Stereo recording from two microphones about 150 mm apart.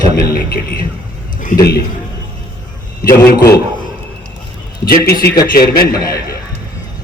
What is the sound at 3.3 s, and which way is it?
Speech, 90° left.